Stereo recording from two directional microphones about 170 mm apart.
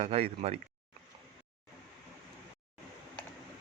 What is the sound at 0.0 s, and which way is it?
Speech, 35° right (ahead or behind).